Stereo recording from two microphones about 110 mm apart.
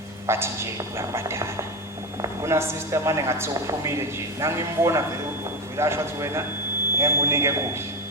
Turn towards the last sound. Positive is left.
turn(degrees=-25)  # may be behind; listen again after turning